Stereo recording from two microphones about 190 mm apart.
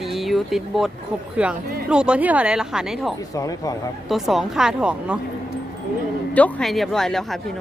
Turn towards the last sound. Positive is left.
turn(degrees=0)  # may be behind; listen again after turning